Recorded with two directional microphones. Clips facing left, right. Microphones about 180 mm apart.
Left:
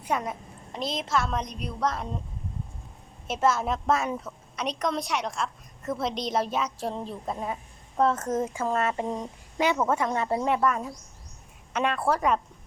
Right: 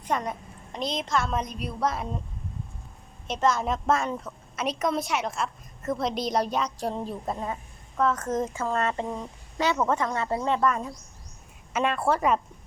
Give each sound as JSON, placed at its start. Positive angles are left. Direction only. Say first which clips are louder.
{"t": 0.0, "sound": "a woman's voice", "louder": "even", "side_deg": 5}
{"t": 3.2, "sound": "a woman's voice", "louder": "even", "side_deg": 5}
{"t": 7.3, "sound": "a woman's voice", "louder": "even", "side_deg": 10}
{"t": 7.9, "sound": "a woman's voice", "louder": "left 1 dB", "side_deg": 30}
{"t": 8.3, "sound": "a woman's voice", "louder": "even", "side_deg": 10}
{"t": 9.0, "sound": "a woman's voice", "louder": "left 2 dB", "side_deg": 20}